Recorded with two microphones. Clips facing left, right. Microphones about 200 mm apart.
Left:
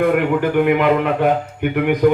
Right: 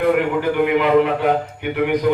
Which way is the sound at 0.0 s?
50° left (ahead or behind).